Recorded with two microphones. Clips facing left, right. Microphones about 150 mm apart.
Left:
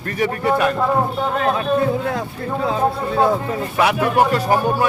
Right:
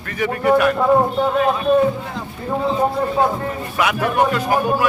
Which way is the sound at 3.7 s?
30° left (ahead or behind).